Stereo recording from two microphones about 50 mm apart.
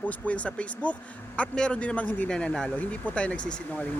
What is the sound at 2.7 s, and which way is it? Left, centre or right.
Speech, left.